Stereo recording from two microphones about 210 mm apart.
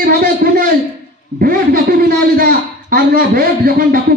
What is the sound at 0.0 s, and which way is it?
A man's voice, 45° right (ahead or behind).